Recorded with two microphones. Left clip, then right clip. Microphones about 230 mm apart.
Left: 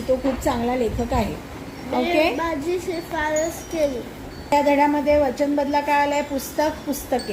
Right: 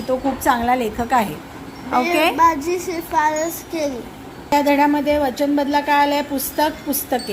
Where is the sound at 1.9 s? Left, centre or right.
Right.